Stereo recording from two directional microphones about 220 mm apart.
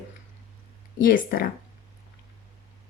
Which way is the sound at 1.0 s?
40° left (ahead or behind).